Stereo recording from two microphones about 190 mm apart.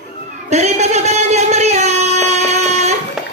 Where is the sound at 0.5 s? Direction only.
35° right (ahead or behind).